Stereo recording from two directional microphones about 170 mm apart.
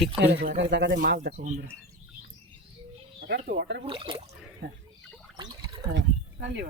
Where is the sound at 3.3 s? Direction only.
60° right (ahead or behind).